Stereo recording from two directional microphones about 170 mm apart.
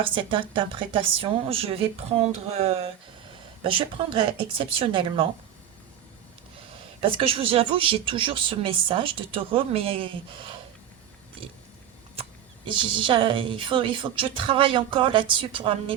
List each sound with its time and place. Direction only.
0.0 s speech: 30° right (ahead or behind)
6.6 s speech: 35° right (ahead or behind)
12.6 s speech: 30° right (ahead or behind)